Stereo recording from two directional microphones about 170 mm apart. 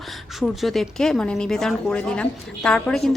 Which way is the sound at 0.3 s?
Centre (ahead or behind).